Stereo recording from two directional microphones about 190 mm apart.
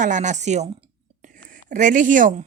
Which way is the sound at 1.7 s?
40° right (ahead or behind).